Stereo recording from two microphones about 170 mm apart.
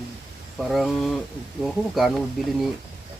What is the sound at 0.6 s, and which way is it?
Speech, centre (ahead or behind).